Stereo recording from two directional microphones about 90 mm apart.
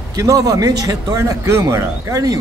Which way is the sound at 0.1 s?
40° right (ahead or behind).